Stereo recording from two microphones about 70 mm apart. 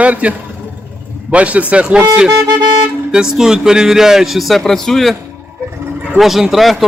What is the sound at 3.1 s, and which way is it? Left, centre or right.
A man's voice, centre.